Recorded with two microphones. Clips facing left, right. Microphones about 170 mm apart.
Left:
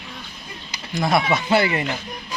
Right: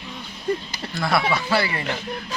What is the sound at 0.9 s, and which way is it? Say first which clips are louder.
Speech: left 2 dB; 20° left (ahead or behind).